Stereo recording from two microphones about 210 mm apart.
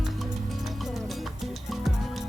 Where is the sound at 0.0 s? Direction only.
Centre (ahead or behind).